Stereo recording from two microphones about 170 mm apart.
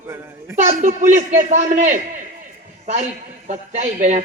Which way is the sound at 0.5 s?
45° right (ahead or behind).